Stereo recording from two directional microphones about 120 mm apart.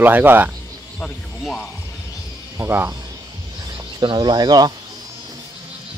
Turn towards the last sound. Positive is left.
turn(degrees=-35)  # may be behind; listen again after turning